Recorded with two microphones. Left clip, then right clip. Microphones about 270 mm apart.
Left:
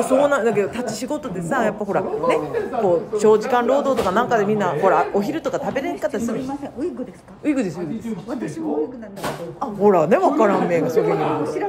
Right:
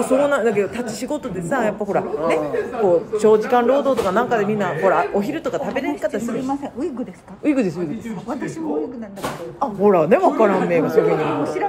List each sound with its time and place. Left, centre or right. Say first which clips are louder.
0.0 s a man's voice: even; centre
7.4 s speech: right 3 dB; centre
9.6 s speech: right 1 dB; centre